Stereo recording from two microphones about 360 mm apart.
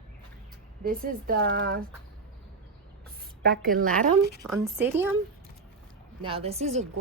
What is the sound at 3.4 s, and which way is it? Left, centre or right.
Speech, right.